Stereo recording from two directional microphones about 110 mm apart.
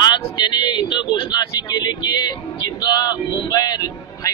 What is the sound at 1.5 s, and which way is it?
Speech, 35° left (ahead or behind).